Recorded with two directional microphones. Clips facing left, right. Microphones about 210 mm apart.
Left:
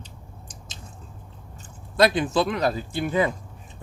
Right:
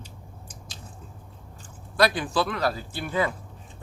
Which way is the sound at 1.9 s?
20° left (ahead or behind).